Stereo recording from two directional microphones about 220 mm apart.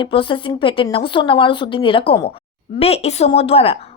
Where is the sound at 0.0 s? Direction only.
25° left (ahead or behind).